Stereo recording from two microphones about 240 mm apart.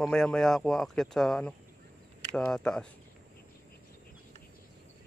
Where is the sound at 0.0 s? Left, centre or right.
Centre.